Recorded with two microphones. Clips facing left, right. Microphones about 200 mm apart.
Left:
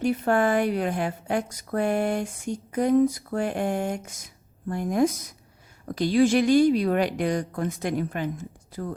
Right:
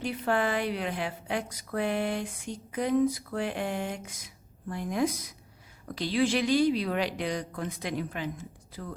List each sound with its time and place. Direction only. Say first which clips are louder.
0.0 s a woman's voice: left 6 dB; 45° left (ahead or behind)